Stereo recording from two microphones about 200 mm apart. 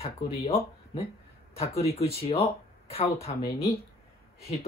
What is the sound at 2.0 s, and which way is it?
Speech, 30° left (ahead or behind).